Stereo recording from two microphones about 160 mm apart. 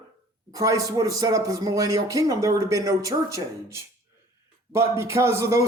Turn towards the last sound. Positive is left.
turn(degrees=-20)  # may be behind; listen again after turning